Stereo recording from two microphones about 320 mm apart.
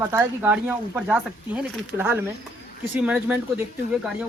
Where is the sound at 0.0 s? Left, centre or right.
Centre.